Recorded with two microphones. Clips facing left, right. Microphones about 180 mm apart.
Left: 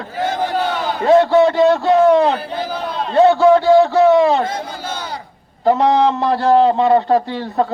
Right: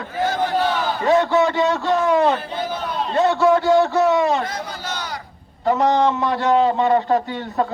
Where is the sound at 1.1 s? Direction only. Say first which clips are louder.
Left 6 dB; 35° left (ahead or behind).